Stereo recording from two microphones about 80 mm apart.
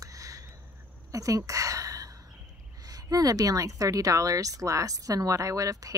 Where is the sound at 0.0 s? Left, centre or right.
Right.